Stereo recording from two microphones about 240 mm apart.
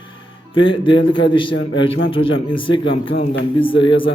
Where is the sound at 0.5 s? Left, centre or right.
Left.